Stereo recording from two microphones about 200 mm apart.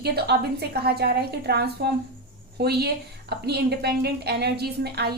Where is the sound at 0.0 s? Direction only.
55° right (ahead or behind).